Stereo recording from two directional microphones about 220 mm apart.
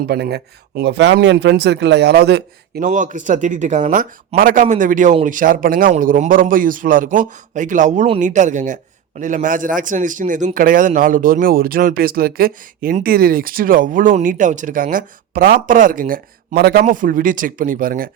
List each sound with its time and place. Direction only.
0.1 s speech: 45° right (ahead or behind)
2.8 s speech: 35° right (ahead or behind)